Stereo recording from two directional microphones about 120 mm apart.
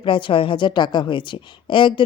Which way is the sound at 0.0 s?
45° left (ahead or behind).